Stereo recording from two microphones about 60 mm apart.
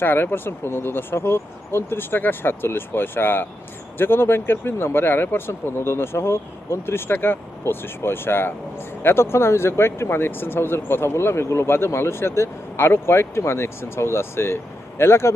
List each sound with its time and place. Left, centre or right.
0.0 s speech: left